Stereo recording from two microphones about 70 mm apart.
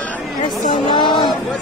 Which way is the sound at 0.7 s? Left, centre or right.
Left.